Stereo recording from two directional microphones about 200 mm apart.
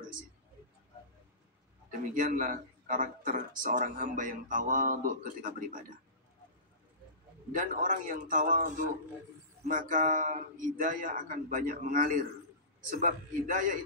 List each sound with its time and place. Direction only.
2.1 s speech: 40° right (ahead or behind)
7.5 s speech: 40° right (ahead or behind)